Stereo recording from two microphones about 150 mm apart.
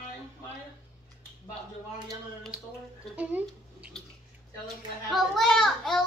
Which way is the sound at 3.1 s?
10° right (ahead or behind).